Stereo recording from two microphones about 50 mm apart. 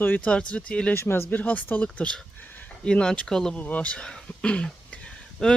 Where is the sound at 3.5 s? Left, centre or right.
Left.